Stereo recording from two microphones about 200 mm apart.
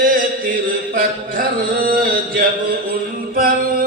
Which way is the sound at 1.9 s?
45° right (ahead or behind).